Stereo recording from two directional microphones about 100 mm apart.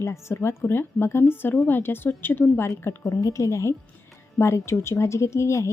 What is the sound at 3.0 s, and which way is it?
A woman's voice, 35° left (ahead or behind).